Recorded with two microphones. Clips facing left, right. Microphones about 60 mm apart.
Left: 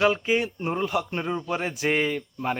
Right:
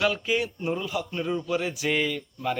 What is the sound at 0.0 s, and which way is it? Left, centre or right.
Speech, left.